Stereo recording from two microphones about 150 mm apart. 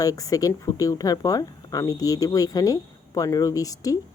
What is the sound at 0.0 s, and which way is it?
Speech, 25° left (ahead or behind).